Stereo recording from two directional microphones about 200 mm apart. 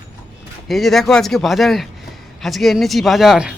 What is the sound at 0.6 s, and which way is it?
A man's voice, centre (ahead or behind).